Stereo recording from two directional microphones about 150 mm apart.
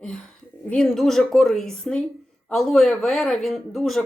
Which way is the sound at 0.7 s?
5° left (ahead or behind).